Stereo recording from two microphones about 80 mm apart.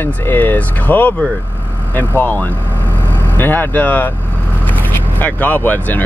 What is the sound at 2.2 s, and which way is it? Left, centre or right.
Speech, left.